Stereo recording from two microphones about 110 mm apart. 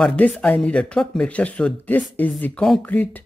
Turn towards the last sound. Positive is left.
turn(degrees=15)  # may be behind; listen again after turning